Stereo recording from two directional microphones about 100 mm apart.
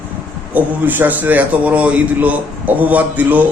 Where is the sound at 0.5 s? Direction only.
15° right (ahead or behind).